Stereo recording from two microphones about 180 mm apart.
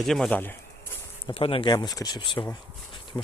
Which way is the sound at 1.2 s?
30° left (ahead or behind).